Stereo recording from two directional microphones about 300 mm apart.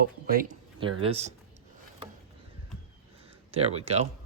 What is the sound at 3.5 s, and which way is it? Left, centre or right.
Speech, centre.